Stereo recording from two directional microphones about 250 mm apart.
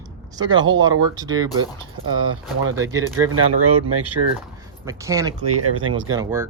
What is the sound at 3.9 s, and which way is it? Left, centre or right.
Speech, right.